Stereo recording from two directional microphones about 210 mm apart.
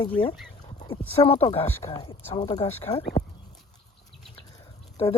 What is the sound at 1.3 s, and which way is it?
Speech, 25° left (ahead or behind).